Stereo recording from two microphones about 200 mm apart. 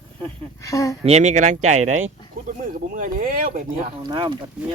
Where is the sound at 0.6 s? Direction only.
15° left (ahead or behind).